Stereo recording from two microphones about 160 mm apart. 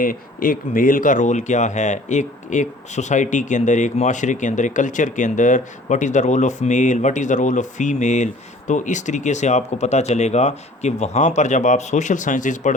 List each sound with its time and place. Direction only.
0.0 s speech: 60° left (ahead or behind)